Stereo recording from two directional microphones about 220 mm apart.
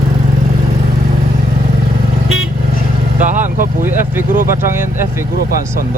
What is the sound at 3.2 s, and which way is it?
Vehicle, 35° right (ahead or behind).